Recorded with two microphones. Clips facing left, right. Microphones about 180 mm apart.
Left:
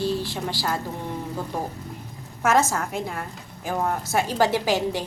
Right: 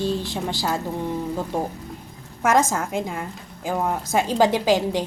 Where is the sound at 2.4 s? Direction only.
15° right (ahead or behind).